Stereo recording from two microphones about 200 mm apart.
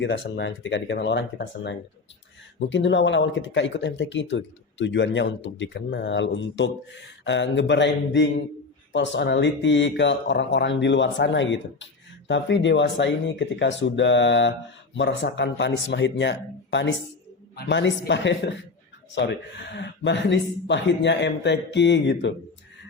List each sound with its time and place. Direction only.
0.0 s speech: 60° left (ahead or behind)